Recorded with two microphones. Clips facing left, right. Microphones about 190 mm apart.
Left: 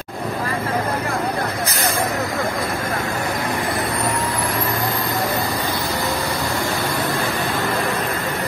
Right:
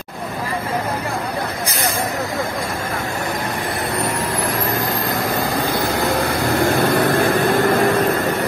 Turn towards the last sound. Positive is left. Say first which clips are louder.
# right 7 dB
turn(degrees=-50)  # may be behind; listen again after turning